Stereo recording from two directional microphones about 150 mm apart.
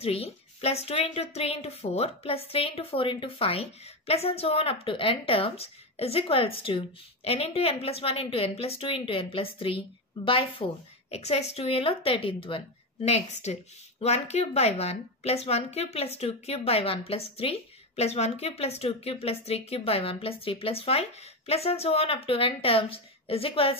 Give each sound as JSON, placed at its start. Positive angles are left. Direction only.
{"t": 0.0, "sound": "speech", "side_deg": 40}